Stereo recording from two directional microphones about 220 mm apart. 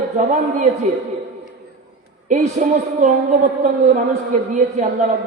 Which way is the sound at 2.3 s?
35° right (ahead or behind).